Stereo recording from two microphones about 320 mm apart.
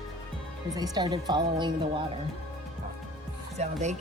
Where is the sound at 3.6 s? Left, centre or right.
Right.